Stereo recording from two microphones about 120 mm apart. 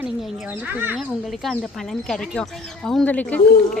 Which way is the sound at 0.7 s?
15° right (ahead or behind).